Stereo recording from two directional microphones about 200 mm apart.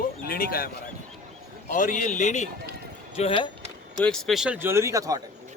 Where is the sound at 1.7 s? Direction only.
40° left (ahead or behind).